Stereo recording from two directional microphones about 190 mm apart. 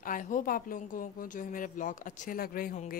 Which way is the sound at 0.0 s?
45° left (ahead or behind).